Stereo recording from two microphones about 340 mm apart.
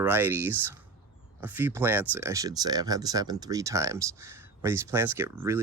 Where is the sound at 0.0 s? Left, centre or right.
Centre.